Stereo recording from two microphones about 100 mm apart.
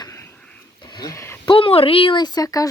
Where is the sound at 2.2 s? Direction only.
40° left (ahead or behind).